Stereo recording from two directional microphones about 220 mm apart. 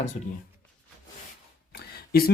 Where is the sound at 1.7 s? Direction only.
45° left (ahead or behind).